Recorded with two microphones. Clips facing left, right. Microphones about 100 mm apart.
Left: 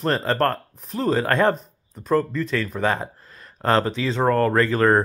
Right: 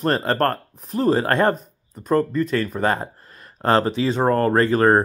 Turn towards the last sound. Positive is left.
turn(degrees=-45)  # may be behind; listen again after turning